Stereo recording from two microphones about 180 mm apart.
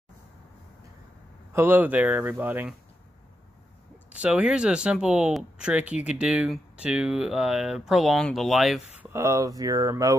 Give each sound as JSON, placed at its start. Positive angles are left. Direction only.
{"t": 1.5, "sound": "speech", "side_deg": -10}
{"t": 4.1, "sound": "speech", "side_deg": -5}
{"t": 9.1, "sound": "speech", "side_deg": -15}